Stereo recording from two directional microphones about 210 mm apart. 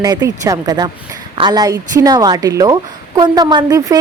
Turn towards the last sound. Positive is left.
turn(degrees=-15)  # may be behind; listen again after turning